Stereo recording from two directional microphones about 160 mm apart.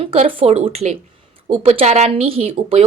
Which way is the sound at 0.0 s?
35° right (ahead or behind).